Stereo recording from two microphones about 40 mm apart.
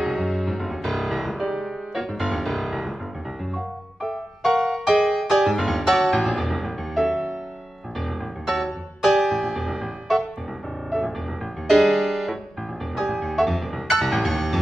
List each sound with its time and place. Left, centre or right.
0.0 s music: centre